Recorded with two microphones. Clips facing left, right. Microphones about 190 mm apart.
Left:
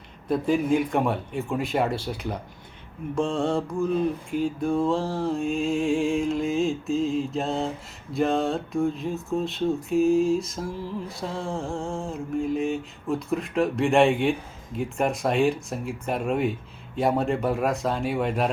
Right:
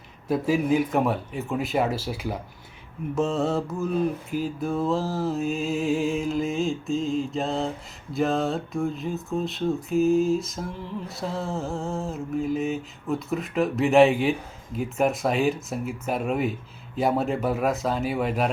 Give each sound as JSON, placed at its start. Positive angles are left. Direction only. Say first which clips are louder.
{"t": 0.3, "sound": "speech", "louder": "even", "side_deg": -5}